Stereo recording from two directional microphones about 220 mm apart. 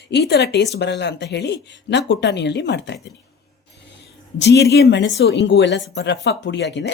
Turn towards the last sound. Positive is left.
turn(degrees=55)  # may be behind; listen again after turning